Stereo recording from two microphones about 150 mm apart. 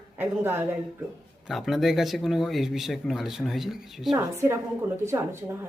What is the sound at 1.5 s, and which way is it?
Speech, centre (ahead or behind).